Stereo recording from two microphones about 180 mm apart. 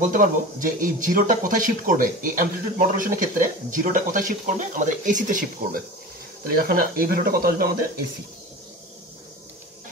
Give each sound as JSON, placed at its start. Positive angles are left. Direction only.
{"t": 0.0, "sound": "speech", "side_deg": -45}